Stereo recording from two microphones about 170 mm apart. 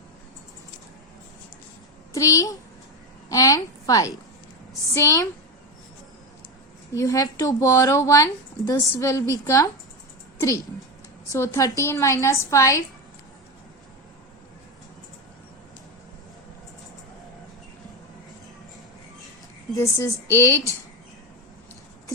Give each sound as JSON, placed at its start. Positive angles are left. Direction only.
{"t": 2.1, "sound": "a woman's voice", "side_deg": 20}
{"t": 6.9, "sound": "a woman's voice", "side_deg": 20}
{"t": 11.3, "sound": "a woman's voice", "side_deg": 15}
{"t": 19.8, "sound": "a woman's voice", "side_deg": 20}